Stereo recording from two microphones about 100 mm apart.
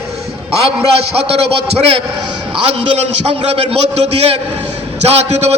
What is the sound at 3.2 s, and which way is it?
A man's voice, 90° right.